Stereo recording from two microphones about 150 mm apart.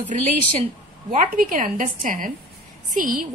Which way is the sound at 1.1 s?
65° right (ahead or behind).